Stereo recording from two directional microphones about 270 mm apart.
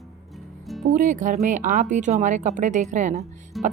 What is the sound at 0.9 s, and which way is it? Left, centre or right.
Speech, right.